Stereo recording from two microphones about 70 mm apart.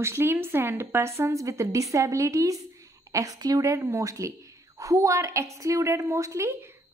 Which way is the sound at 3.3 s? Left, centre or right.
Right.